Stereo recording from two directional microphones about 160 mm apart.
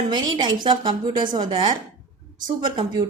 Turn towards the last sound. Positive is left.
turn(degrees=-30)  # may be behind; listen again after turning